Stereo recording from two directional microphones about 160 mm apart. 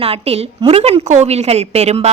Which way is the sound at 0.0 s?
40° right (ahead or behind).